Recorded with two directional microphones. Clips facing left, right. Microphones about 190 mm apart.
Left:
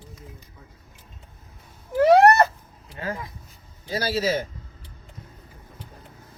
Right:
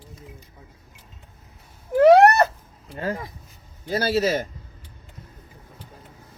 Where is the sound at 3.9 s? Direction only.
60° right (ahead or behind).